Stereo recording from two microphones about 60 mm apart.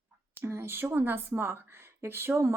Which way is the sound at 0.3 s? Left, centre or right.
Right.